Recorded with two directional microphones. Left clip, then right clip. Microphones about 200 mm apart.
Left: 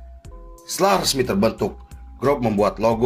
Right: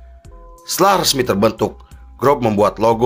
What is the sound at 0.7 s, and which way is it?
A man's voice, 45° right (ahead or behind).